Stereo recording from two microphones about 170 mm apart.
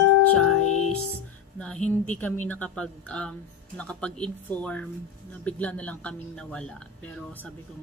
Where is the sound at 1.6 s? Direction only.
5° left (ahead or behind).